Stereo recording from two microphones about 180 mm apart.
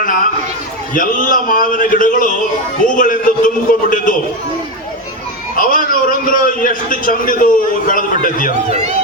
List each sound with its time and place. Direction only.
0.9 s a man's voice: 50° left (ahead or behind)
5.5 s a man's voice: 50° left (ahead or behind)